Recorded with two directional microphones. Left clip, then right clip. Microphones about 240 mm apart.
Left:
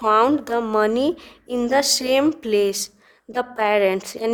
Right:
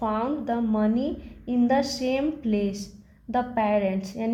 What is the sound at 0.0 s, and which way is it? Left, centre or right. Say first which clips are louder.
A woman's voice: left 10 dB; left.